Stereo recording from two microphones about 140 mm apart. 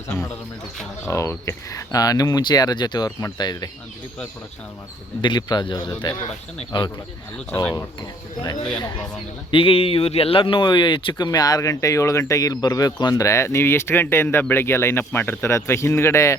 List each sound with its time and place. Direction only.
0.1 s speech: 15° left (ahead or behind)
5.2 s speech: 30° left (ahead or behind)
7.3 s speech: 10° left (ahead or behind)
8.0 s speech: 30° left (ahead or behind)
9.5 s speech: 40° left (ahead or behind); by 16.3 s 20° left (ahead or behind)